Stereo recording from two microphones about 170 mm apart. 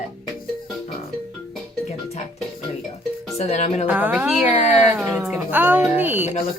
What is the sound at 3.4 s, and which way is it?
Speech, 40° left (ahead or behind).